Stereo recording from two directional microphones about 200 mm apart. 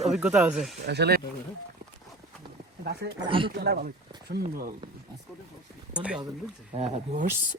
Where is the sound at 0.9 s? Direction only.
55° right (ahead or behind).